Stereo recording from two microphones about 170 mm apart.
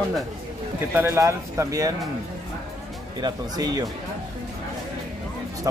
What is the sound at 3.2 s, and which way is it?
Speech, 25° right (ahead or behind).